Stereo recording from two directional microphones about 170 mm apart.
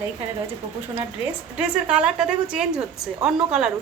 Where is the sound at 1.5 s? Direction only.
5° right (ahead or behind).